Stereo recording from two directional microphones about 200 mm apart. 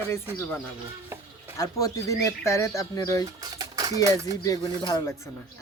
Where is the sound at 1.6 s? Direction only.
15° left (ahead or behind).